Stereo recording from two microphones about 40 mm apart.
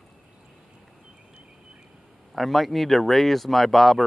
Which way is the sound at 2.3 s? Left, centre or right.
Centre.